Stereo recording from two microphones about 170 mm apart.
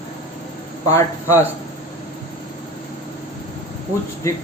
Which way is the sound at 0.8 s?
15° left (ahead or behind).